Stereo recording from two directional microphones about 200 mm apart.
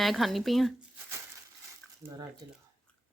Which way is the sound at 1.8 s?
5° left (ahead or behind).